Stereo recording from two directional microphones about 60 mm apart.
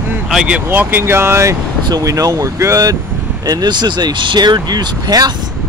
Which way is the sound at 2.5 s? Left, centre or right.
Right.